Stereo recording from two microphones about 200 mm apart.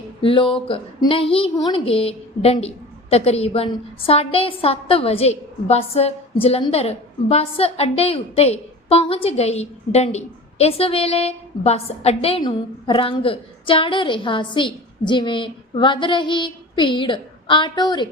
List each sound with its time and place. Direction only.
0.2 s a woman's voice: 25° left (ahead or behind)